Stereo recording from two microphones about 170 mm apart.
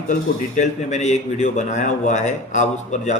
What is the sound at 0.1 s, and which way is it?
Speech, 45° left (ahead or behind).